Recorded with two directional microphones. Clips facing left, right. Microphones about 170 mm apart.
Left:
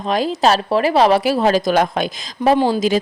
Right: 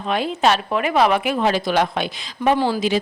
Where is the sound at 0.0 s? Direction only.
35° left (ahead or behind).